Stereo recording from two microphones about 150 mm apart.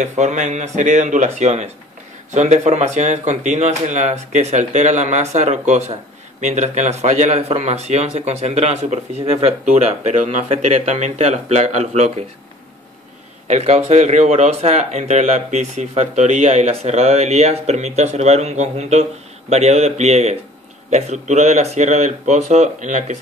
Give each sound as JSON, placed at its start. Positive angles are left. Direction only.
{"t": 0.0, "sound": "speech", "side_deg": -50}
{"t": 13.5, "sound": "speech", "side_deg": -50}